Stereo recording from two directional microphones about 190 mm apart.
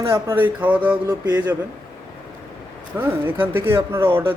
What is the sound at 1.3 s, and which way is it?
Speech, 20° right (ahead or behind).